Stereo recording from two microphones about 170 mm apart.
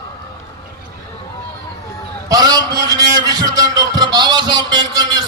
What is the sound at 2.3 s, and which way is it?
A man's voice, 25° right (ahead or behind).